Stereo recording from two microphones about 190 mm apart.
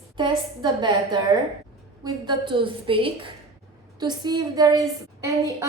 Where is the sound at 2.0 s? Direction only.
25° right (ahead or behind).